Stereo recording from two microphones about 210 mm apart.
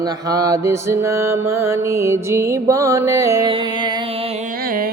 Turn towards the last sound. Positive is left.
turn(degrees=-20)  # may be behind; listen again after turning